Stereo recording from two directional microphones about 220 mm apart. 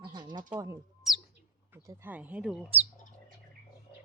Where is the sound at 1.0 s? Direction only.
Centre (ahead or behind).